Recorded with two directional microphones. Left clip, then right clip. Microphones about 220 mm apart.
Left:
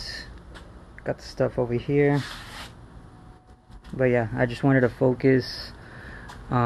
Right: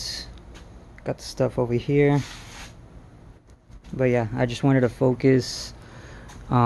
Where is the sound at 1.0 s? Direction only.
10° right (ahead or behind).